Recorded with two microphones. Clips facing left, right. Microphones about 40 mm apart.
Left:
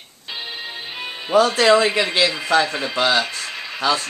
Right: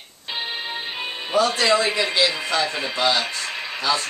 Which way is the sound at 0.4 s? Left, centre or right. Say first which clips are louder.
Right 3 dB; right.